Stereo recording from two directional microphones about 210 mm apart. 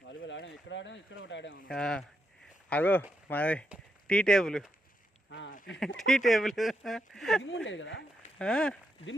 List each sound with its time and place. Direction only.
0.1 s speech: 60° left (ahead or behind)
1.6 s speech: 5° left (ahead or behind)
6.1 s speech: centre (ahead or behind)
7.4 s speech: 60° left (ahead or behind)
8.4 s speech: 5° left (ahead or behind)